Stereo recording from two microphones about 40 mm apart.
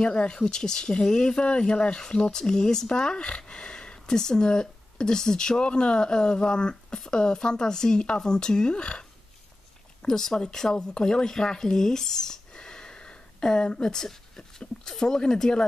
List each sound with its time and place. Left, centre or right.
0.0 s speech: left
10.0 s speech: centre